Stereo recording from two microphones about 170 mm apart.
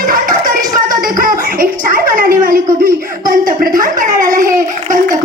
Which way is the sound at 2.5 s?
55° right (ahead or behind).